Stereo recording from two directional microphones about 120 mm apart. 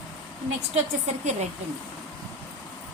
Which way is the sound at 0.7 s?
70° right (ahead or behind).